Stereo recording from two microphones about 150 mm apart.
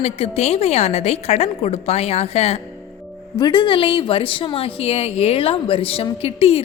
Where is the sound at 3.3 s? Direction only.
30° left (ahead or behind).